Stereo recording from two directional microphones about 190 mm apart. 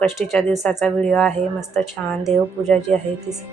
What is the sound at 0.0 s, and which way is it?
Speech, centre (ahead or behind).